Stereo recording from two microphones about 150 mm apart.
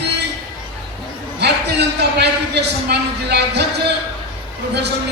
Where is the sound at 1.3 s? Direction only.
90° right.